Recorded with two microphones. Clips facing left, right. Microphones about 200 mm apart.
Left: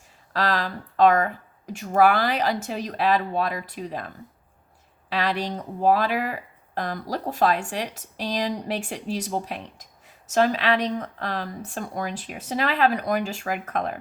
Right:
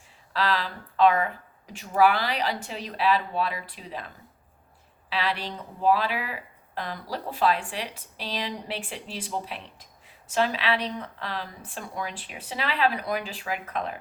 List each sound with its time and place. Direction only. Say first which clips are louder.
0.3 s speech: left 2 dB; 45° left (ahead or behind)